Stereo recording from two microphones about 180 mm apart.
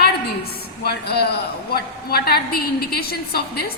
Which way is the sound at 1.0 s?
65° left (ahead or behind).